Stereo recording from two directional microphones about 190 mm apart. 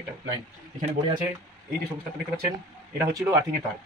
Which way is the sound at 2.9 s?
15° right (ahead or behind).